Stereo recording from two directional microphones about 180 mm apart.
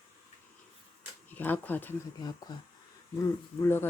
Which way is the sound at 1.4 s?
10° left (ahead or behind).